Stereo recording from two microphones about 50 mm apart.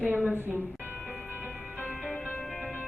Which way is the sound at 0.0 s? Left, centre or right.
Right.